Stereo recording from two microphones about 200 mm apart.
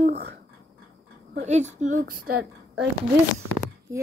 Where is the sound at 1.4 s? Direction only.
35° right (ahead or behind).